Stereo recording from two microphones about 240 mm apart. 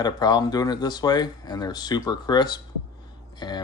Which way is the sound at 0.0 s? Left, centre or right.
Centre.